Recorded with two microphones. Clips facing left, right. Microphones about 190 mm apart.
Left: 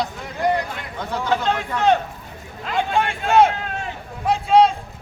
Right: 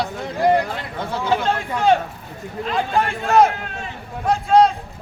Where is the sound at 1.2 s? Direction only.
10° right (ahead or behind).